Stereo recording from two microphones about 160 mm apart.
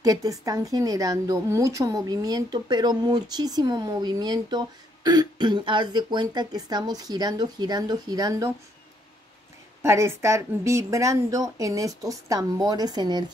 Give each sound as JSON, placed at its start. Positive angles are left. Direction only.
{"t": 0.0, "sound": "speech", "side_deg": -20}
{"t": 9.8, "sound": "speech", "side_deg": -15}